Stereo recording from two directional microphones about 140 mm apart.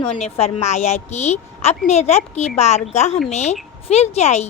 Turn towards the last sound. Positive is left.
turn(degrees=50)  # may be behind; listen again after turning